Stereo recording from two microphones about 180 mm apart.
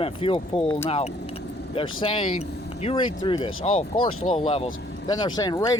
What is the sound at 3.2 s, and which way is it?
Speech, 25° left (ahead or behind).